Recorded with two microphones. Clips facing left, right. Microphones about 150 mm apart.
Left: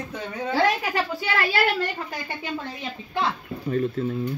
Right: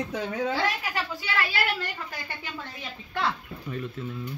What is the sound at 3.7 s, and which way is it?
Speech, 40° left (ahead or behind).